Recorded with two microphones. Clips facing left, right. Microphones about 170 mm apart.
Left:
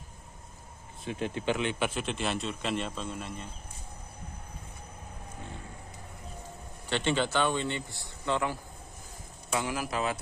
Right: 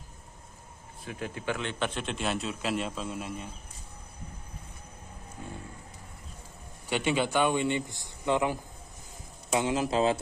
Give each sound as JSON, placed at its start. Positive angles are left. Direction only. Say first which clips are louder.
{"t": 1.0, "sound": "a man's voice", "louder": "left 3 dB", "side_deg": 25}
{"t": 6.9, "sound": "speech", "louder": "right 1 dB", "side_deg": -10}